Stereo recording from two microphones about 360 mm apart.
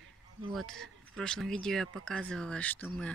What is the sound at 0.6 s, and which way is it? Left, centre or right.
Speech, centre.